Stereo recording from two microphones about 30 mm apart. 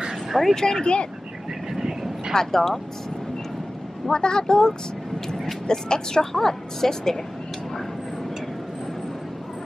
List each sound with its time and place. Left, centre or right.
0.3 s speech: centre
0.6 s speech: left
1.7 s vehicle: centre
2.3 s a woman's voice: centre
4.1 s a woman's voice: left